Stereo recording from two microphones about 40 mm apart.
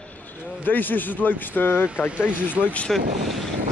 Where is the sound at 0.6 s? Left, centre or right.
Left.